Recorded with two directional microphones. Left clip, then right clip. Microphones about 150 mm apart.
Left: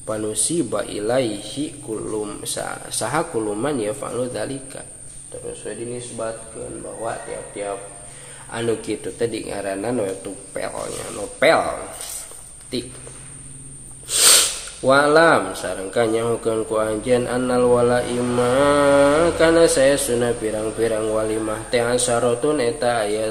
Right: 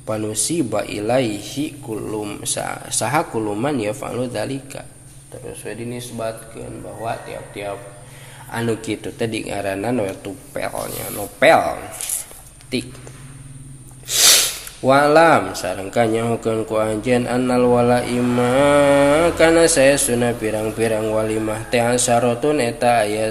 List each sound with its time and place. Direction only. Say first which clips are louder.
0.0 s speech: right 1 dB; 30° right (ahead or behind)
5.9 s speech: right 3 dB; 35° right (ahead or behind)
8.5 s speech: even; 35° right (ahead or behind)
14.0 s a sound: right 2 dB; 30° right (ahead or behind)
14.9 s speech: right 2 dB; 40° right (ahead or behind)